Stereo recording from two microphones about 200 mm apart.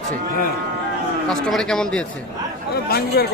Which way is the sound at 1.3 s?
5° left (ahead or behind).